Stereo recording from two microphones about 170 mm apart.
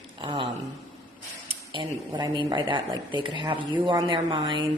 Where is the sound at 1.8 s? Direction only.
25° right (ahead or behind).